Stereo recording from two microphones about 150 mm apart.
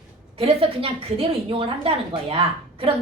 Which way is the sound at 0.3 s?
40° right (ahead or behind).